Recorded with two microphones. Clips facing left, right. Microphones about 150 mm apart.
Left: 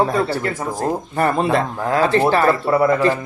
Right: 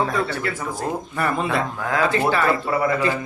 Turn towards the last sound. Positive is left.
turn(degrees=40)  # may be behind; listen again after turning